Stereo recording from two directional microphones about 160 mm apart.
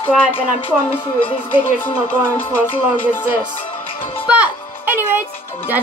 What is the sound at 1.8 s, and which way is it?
Music, 10° left (ahead or behind).